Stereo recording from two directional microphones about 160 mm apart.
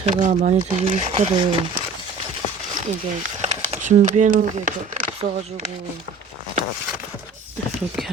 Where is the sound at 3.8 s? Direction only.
50° right (ahead or behind).